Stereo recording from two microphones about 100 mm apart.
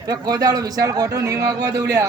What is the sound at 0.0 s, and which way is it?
A man's voice, 35° right (ahead or behind).